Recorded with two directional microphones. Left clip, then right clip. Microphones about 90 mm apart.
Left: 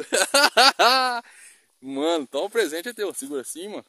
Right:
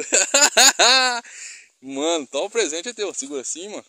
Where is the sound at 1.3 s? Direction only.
10° left (ahead or behind).